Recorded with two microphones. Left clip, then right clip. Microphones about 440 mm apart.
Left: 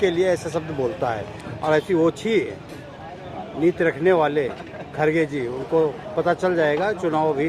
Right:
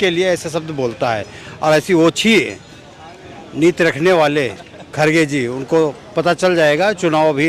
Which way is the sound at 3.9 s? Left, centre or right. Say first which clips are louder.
Right 5 dB; right.